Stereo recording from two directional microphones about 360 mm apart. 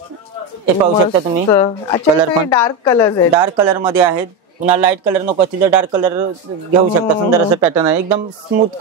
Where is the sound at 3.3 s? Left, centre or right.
Centre.